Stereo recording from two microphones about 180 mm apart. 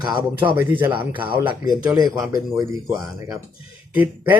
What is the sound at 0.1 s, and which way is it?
Speech, 10° right (ahead or behind).